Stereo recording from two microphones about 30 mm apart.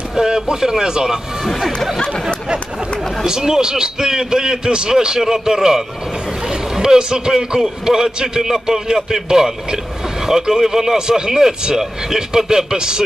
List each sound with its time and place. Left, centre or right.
0.1 s a man's voice: right
3.3 s a man's voice: centre
11.0 s a man's voice: right